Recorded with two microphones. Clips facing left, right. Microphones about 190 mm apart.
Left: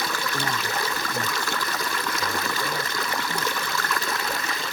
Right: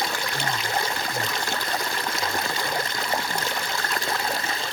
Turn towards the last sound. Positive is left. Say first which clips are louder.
# right 1 dB
turn(degrees=-30)  # may be behind; listen again after turning